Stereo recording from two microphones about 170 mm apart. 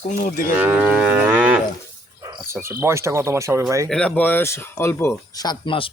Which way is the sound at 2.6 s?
15° right (ahead or behind).